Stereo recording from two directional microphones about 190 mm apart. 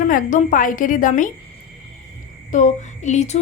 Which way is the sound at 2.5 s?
40° left (ahead or behind).